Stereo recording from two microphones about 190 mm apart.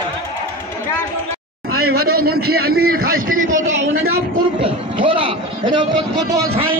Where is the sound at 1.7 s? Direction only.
55° right (ahead or behind); by 6.4 s 20° right (ahead or behind).